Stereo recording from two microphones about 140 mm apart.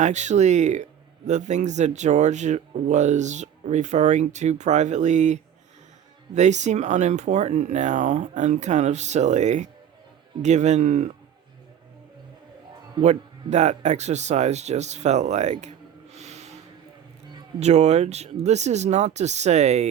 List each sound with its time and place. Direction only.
0.0 s speech: 55° right (ahead or behind)
13.0 s speech: 55° right (ahead or behind)
16.1 s snort: 50° right (ahead or behind)
17.6 s speech: 50° right (ahead or behind)